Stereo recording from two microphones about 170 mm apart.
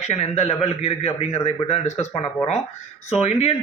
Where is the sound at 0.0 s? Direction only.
40° left (ahead or behind).